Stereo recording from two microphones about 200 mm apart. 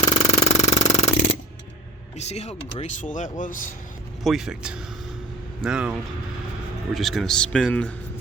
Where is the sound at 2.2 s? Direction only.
35° left (ahead or behind).